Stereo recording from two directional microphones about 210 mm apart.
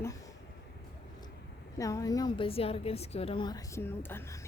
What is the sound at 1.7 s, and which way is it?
A woman's voice, 15° left (ahead or behind).